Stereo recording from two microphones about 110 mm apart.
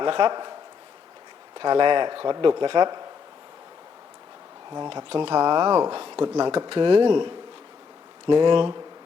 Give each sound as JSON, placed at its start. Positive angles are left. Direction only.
{"t": 0.0, "sound": "speech", "side_deg": -45}
{"t": 1.5, "sound": "speech", "side_deg": -45}
{"t": 4.7, "sound": "speech", "side_deg": -45}